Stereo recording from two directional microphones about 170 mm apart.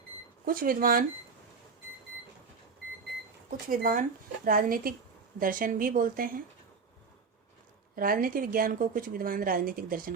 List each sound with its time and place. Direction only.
0.4 s a woman's voice: 60° right (ahead or behind)
3.7 s a woman's voice: 60° right (ahead or behind)
7.9 s a woman's voice: 55° right (ahead or behind)